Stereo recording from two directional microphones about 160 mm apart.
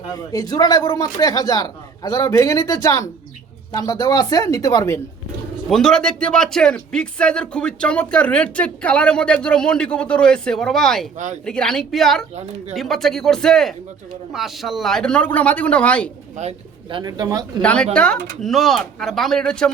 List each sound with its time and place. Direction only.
0.2 s speech: 25° left (ahead or behind)
5.6 s speech: 5° left (ahead or behind)
16.4 s speech: 45° right (ahead or behind)
17.0 s speech: 25° right (ahead or behind)
17.6 s speech: 10° left (ahead or behind)